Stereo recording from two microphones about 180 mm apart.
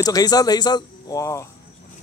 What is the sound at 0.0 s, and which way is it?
Speech, 20° left (ahead or behind).